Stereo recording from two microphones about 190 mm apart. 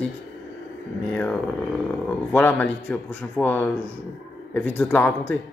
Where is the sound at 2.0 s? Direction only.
10° left (ahead or behind).